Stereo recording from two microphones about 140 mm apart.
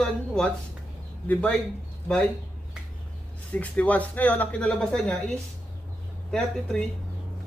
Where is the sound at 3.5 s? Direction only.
10° left (ahead or behind).